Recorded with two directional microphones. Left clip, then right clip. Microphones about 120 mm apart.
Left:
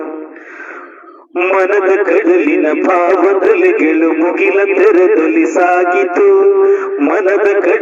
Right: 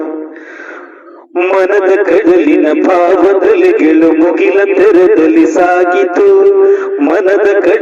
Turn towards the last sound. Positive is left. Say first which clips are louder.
# right 3 dB
turn(degrees=-25)  # may be behind; listen again after turning